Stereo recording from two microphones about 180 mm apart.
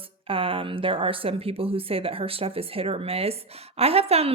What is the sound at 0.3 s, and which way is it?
Speech, 30° right (ahead or behind).